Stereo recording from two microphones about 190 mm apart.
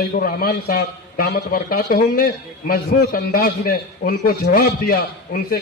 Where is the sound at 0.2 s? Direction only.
50° left (ahead or behind).